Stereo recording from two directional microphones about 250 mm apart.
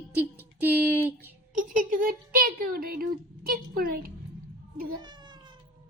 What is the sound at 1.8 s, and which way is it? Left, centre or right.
Speech, right.